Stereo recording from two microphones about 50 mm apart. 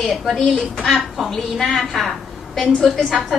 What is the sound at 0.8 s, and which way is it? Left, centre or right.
A woman's voice, centre.